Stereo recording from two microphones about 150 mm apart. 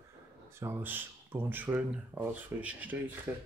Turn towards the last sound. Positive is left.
turn(degrees=-10)  # may be behind; listen again after turning